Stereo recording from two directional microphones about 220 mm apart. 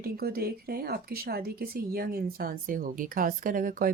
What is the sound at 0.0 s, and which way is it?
Speech, 45° right (ahead or behind).